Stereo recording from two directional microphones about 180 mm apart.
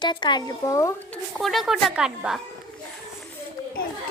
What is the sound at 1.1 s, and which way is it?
Speech, centre (ahead or behind).